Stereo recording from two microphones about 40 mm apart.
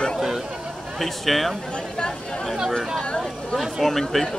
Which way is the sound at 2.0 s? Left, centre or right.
Left.